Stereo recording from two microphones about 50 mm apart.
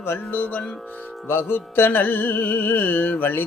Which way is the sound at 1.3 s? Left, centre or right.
Left.